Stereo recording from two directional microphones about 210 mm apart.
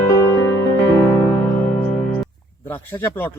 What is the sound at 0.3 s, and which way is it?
Music, 15° left (ahead or behind).